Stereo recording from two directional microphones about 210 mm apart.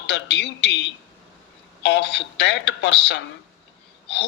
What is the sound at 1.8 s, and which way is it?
A woman's voice, 55° left (ahead or behind).